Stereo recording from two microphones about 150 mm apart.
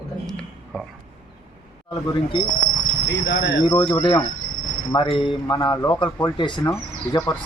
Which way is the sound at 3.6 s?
35° left (ahead or behind).